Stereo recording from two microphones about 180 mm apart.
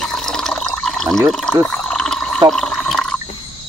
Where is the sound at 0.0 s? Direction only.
5° left (ahead or behind).